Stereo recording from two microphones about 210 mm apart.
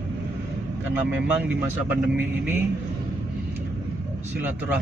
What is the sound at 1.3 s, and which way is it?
Speech, 5° right (ahead or behind).